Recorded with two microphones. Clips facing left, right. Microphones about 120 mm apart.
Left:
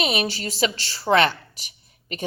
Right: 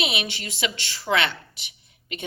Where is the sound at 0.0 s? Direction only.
40° left (ahead or behind).